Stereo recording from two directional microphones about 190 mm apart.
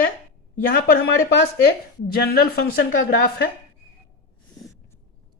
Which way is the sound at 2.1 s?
55° left (ahead or behind).